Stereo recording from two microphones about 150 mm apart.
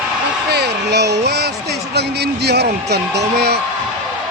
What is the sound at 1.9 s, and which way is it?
A man's voice, 90° right.